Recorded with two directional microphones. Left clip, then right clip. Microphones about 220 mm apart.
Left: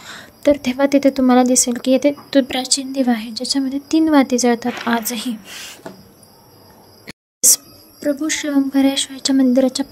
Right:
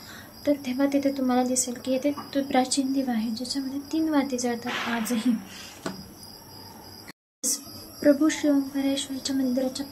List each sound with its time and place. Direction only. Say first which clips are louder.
0.0 s a woman's voice: left 12 dB; 45° left (ahead or behind)
7.1 s a sound: left 15 dB; 50° left (ahead or behind)
8.0 s a woman's voice: even; centre (ahead or behind)
8.3 s a woman's voice: left 5 dB; 50° left (ahead or behind)